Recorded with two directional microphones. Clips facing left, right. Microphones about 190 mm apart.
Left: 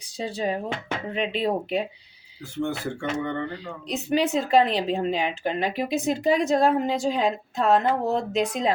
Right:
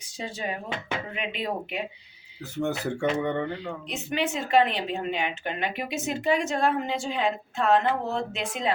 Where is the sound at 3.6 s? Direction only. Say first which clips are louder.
Left 2 dB; 35° left (ahead or behind).